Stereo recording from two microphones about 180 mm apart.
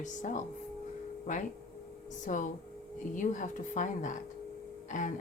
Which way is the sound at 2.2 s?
45° left (ahead or behind).